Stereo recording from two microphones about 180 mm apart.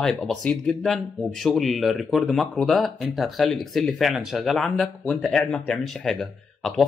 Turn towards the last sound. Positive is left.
turn(degrees=0)  # may be behind; listen again after turning